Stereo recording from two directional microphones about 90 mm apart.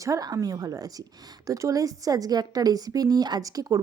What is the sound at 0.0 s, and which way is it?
A woman's voice, 40° right (ahead or behind).